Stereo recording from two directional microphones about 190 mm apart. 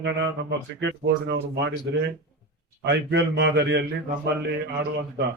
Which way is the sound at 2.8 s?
65° right (ahead or behind).